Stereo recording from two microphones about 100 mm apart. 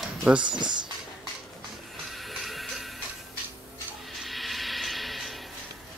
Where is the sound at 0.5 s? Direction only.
50° right (ahead or behind).